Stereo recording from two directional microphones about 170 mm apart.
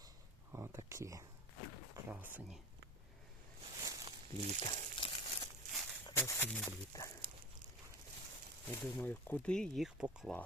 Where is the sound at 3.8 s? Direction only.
20° right (ahead or behind).